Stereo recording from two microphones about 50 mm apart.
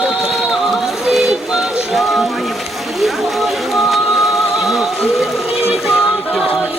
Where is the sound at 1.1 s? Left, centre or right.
Centre.